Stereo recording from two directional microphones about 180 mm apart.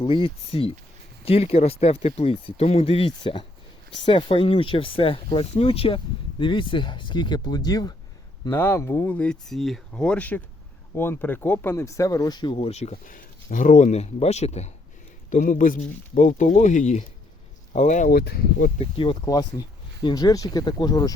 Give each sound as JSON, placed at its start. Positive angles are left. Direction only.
{"t": 0.0, "sound": "speech", "side_deg": 30}
{"t": 18.8, "sound": "speech", "side_deg": 30}